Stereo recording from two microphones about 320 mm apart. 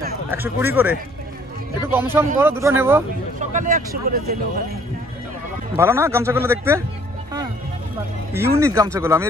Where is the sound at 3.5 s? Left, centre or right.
Right.